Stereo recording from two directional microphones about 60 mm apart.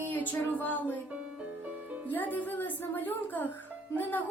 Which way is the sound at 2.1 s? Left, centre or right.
Left.